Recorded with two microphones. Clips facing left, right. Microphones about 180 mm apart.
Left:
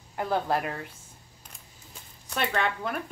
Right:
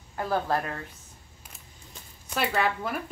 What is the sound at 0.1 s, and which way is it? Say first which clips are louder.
Speech: even; 20° left (ahead or behind).